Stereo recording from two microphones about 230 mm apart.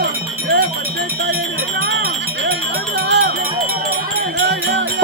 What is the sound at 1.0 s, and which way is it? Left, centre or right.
Music, right.